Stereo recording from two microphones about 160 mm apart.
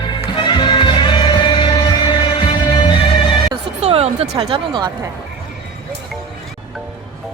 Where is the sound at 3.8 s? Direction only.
40° right (ahead or behind).